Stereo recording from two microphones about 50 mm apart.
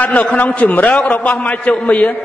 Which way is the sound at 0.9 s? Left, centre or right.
Centre.